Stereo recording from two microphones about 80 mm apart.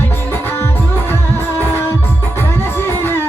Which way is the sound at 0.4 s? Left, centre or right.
Left.